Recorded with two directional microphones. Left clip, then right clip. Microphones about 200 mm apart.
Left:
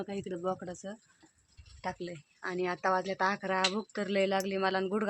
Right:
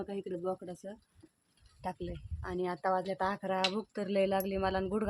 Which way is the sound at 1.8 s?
5° left (ahead or behind).